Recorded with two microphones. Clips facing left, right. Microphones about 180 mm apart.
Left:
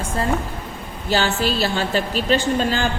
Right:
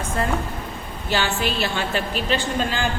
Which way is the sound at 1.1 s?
40° left (ahead or behind).